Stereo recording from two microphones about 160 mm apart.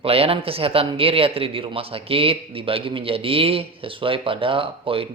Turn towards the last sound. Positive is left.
turn(degrees=-35)  # may be behind; listen again after turning